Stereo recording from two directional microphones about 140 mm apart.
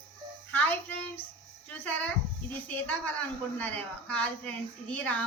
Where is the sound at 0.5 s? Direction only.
10° left (ahead or behind).